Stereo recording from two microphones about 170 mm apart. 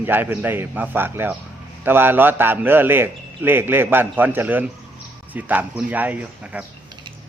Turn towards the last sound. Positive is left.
turn(degrees=-10)  # may be behind; listen again after turning